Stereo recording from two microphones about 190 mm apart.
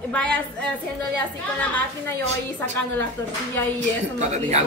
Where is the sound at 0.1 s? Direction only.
5° left (ahead or behind).